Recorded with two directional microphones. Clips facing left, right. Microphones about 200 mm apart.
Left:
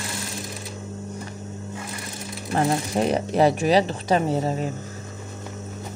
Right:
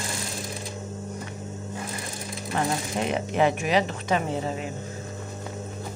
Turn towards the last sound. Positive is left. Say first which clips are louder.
# left 5 dB
turn(degrees=40)  # may be behind; listen again after turning